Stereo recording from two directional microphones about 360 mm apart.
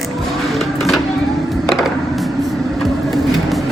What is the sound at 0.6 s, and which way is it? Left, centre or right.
Music, centre.